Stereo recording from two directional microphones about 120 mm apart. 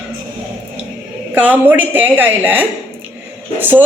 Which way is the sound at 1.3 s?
15° right (ahead or behind).